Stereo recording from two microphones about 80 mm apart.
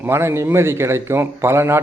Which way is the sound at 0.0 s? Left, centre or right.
Right.